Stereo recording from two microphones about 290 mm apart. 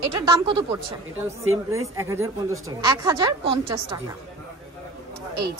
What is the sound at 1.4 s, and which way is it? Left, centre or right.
Speech, right.